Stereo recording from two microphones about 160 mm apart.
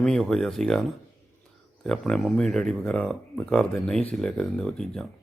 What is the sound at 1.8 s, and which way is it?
Speech, 5° left (ahead or behind).